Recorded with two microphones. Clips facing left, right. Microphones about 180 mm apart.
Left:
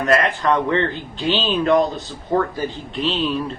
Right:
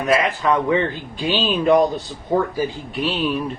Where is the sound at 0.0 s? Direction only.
5° right (ahead or behind).